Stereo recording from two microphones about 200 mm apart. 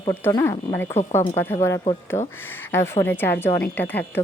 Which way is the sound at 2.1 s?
25° left (ahead or behind).